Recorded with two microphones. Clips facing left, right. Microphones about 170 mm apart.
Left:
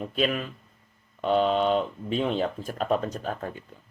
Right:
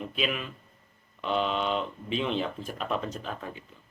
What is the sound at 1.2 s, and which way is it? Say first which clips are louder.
Speech: left 6 dB; 40° left (ahead or behind).